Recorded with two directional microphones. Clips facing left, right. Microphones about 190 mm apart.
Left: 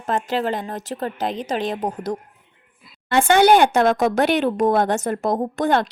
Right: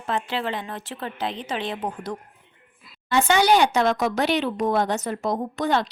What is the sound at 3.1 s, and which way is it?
Speech, 55° left (ahead or behind).